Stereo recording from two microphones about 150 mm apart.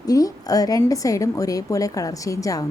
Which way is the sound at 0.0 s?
25° left (ahead or behind).